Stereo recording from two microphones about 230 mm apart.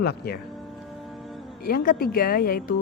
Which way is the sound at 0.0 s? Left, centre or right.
Left.